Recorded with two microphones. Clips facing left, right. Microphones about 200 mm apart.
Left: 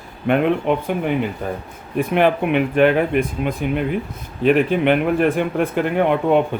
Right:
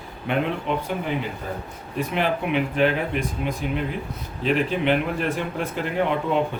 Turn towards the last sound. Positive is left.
turn(degrees=55)  # may be behind; listen again after turning